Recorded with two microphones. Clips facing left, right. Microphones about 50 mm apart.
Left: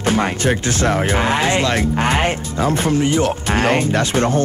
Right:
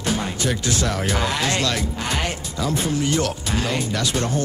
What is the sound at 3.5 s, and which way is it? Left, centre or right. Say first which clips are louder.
Speech: left 8 dB; left.